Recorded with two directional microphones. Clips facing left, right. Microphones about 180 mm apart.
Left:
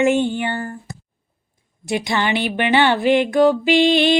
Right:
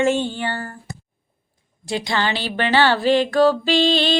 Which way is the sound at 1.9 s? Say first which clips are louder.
Left 2 dB; 20° left (ahead or behind).